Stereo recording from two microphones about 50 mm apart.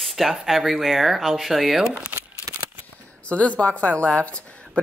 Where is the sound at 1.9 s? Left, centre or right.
Centre.